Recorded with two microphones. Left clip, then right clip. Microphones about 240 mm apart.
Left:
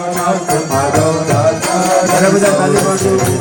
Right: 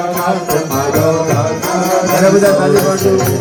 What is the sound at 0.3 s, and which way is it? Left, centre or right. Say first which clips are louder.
Music: even; left.